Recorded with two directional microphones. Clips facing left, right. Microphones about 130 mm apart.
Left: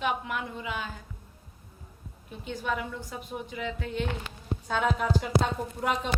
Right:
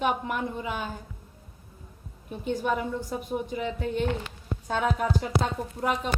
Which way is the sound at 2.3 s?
45° right (ahead or behind).